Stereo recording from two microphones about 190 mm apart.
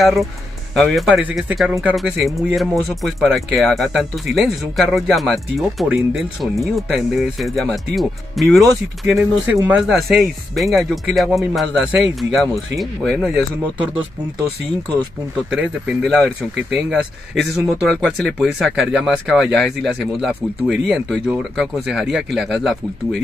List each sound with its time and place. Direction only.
0.0 s speech: centre (ahead or behind)
15.5 s speech: centre (ahead or behind)